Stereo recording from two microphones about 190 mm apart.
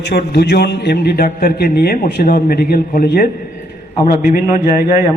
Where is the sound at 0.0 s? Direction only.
60° left (ahead or behind).